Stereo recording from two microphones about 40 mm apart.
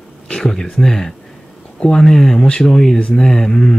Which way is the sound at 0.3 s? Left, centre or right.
Centre.